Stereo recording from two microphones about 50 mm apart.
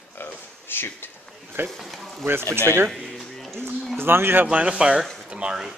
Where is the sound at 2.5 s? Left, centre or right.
Right.